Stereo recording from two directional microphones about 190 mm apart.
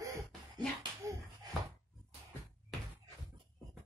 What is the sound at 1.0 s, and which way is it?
Bouncing, 15° right (ahead or behind).